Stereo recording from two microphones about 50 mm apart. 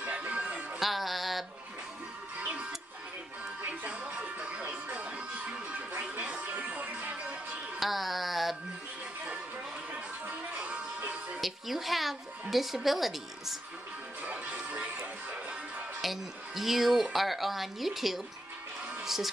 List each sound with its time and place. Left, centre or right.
0.0 s music: right
0.3 s music: right
0.7 s music: centre
3.8 s music: right
7.8 s a sound: centre
10.6 s music: right
11.4 s a woman's voice: centre
14.2 s music: right
16.0 s a woman's voice: centre
19.0 s music: centre